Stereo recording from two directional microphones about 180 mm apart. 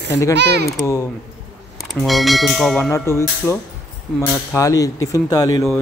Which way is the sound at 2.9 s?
15° left (ahead or behind).